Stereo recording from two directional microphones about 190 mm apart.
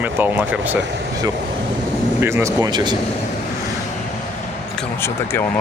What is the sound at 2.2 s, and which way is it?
Speech, 15° right (ahead or behind).